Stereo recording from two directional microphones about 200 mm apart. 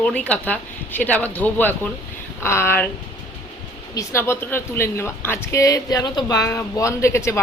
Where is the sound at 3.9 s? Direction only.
15° left (ahead or behind).